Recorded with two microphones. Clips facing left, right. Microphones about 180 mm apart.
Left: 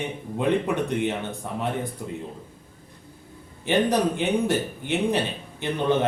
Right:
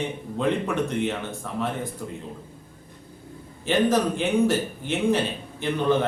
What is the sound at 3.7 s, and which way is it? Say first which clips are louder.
A man's voice: even; 20° left (ahead or behind).